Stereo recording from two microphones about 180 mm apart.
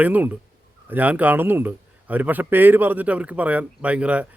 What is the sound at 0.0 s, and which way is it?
Speech, 10° right (ahead or behind).